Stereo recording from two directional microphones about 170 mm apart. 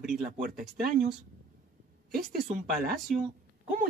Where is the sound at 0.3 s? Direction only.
55° right (ahead or behind).